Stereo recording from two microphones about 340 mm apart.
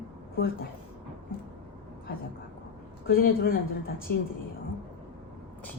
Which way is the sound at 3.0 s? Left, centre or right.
Left.